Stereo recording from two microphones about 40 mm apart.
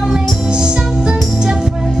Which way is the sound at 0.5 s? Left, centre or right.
Centre.